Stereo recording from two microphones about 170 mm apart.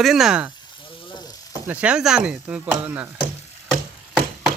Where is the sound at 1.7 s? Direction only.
5° right (ahead or behind).